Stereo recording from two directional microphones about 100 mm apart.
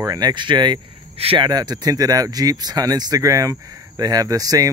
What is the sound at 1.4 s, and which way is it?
Speech, 45° right (ahead or behind).